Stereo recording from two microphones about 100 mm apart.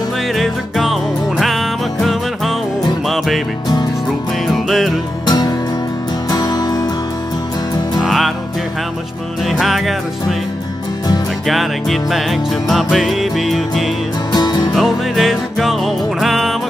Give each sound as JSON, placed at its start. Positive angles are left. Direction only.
{"t": 0.3, "sound": "music", "side_deg": 0}
{"t": 4.6, "sound": "music", "side_deg": 0}
{"t": 5.2, "sound": "music", "side_deg": 45}
{"t": 8.0, "sound": "music", "side_deg": 0}
{"t": 9.4, "sound": "music", "side_deg": 0}
{"t": 11.4, "sound": "music", "side_deg": 0}
{"t": 14.3, "sound": "music", "side_deg": 45}
{"t": 14.7, "sound": "music", "side_deg": 0}